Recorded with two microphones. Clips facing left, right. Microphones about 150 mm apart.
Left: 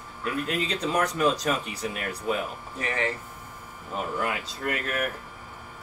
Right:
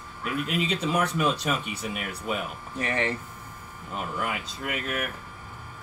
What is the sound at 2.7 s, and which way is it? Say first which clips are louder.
Speech: right 1 dB; 25° right (ahead or behind).